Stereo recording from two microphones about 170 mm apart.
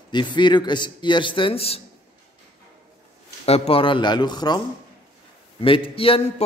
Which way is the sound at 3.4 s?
35° left (ahead or behind).